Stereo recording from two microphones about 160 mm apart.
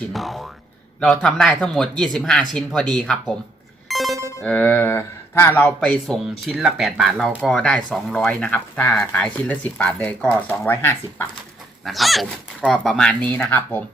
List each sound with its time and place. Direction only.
0.1 s speech: centre (ahead or behind)
3.8 s music: centre (ahead or behind)
4.4 s speech: 10° left (ahead or behind)
11.9 s speech: centre (ahead or behind)